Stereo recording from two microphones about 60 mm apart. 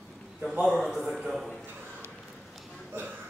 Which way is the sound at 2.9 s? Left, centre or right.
Right.